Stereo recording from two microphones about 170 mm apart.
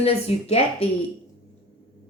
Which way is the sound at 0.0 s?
40° left (ahead or behind).